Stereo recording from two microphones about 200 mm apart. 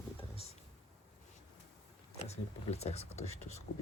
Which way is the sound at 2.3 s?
35° left (ahead or behind).